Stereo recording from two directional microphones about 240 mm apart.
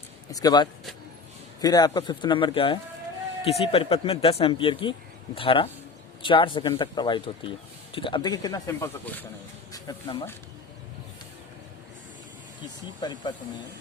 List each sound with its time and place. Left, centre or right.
0.3 s speech: centre
13.0 s speech: centre